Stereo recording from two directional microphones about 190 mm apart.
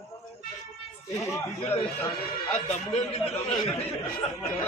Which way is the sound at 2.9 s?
30° left (ahead or behind).